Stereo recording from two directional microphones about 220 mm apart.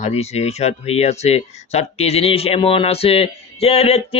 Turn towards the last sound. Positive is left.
turn(degrees=30)  # may be behind; listen again after turning